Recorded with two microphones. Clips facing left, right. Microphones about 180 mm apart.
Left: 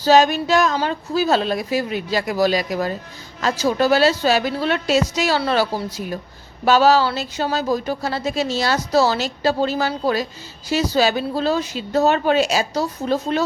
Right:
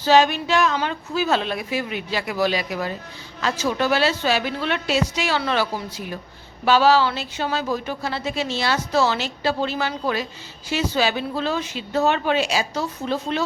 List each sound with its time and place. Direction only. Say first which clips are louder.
0.0 s speech: left 2 dB; 40° left (ahead or behind)